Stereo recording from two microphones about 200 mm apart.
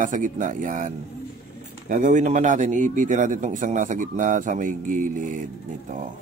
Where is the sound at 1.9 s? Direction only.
40° right (ahead or behind).